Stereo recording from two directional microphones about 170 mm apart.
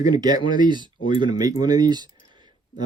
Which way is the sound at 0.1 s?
25° right (ahead or behind).